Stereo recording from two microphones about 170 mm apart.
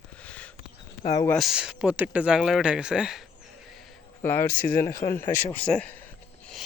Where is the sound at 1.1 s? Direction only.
20° left (ahead or behind).